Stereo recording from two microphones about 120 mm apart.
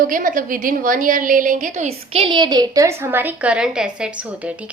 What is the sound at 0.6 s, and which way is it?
A woman's voice, 90° right.